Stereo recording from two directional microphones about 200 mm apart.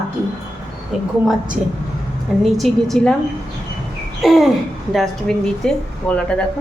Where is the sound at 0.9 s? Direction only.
Centre (ahead or behind).